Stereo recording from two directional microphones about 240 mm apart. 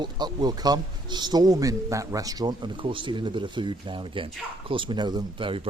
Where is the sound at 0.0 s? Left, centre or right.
Centre.